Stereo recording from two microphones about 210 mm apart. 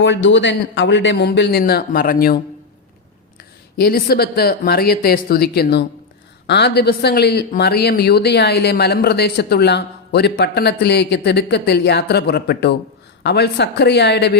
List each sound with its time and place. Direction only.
0.0 s speech: 60° left (ahead or behind)
3.8 s speech: 45° left (ahead or behind)